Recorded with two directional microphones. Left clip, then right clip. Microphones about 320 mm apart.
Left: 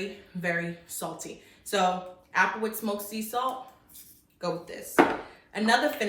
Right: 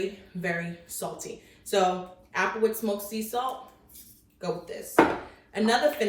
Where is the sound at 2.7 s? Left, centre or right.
Left.